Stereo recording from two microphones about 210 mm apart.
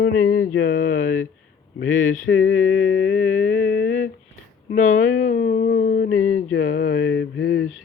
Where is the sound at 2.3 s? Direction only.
70° left (ahead or behind).